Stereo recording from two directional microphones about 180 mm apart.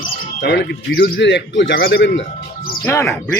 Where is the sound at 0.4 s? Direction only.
75° left (ahead or behind).